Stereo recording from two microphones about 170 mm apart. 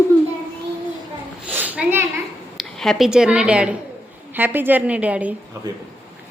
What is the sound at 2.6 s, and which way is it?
A woman's voice, centre (ahead or behind).